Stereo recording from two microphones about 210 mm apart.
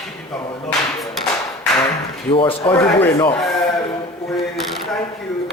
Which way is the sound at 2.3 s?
25° left (ahead or behind).